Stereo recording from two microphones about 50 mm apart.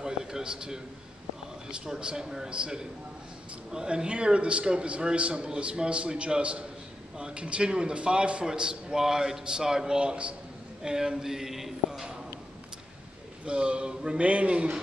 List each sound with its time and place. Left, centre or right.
0.0 s a sound: centre
1.7 s a man's voice: centre
13.5 s a man's voice: centre